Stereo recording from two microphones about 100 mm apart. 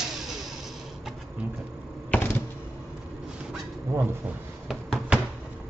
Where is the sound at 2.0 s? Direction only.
20° left (ahead or behind).